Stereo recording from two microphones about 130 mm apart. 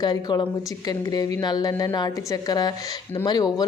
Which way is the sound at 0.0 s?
30° left (ahead or behind).